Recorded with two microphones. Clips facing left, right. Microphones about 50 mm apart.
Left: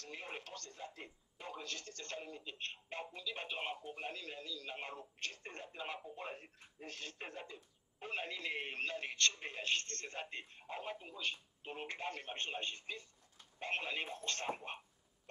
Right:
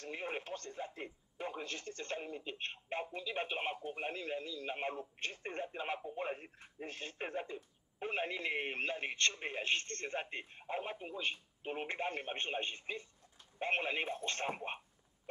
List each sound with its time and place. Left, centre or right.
0.0 s speech: right